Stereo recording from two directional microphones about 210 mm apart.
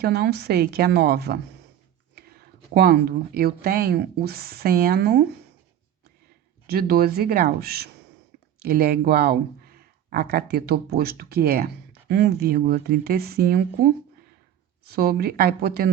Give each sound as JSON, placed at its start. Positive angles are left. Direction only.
{"t": 0.0, "sound": "speech", "side_deg": -50}
{"t": 2.7, "sound": "speech", "side_deg": -50}
{"t": 6.7, "sound": "speech", "side_deg": -45}